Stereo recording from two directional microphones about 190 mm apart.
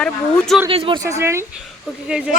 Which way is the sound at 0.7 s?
30° right (ahead or behind).